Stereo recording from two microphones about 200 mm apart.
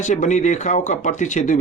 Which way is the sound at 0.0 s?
35° left (ahead or behind).